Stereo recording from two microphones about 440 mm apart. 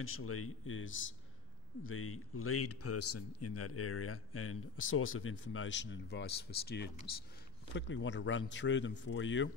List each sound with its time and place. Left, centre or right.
0.0 s a man's voice: left